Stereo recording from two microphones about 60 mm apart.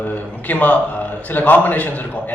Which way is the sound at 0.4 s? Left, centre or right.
Left.